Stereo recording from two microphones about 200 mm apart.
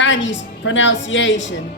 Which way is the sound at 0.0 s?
65° left (ahead or behind).